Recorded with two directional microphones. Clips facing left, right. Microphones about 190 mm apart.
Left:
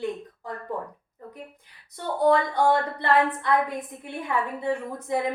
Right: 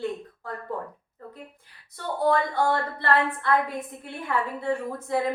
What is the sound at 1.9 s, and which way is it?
A woman's voice, 20° left (ahead or behind).